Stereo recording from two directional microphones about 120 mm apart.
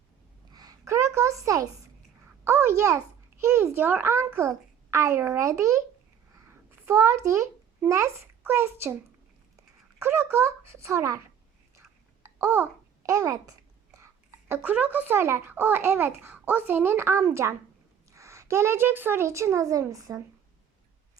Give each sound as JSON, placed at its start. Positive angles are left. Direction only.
{"t": 0.5, "sound": "a sound", "side_deg": -30}
{"t": 2.4, "sound": "a child's voice", "side_deg": -20}
{"t": 12.2, "sound": "a child's voice", "side_deg": -20}